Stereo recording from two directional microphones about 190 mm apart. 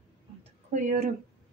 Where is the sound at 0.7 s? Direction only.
40° right (ahead or behind).